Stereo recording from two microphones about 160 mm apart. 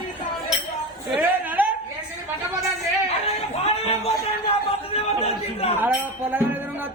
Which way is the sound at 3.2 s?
40° left (ahead or behind).